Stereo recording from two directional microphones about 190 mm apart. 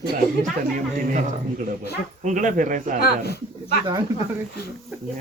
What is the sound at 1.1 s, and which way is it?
A man's voice, 40° right (ahead or behind).